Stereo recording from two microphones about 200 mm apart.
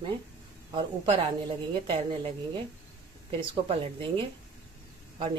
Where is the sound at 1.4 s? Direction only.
25° right (ahead or behind).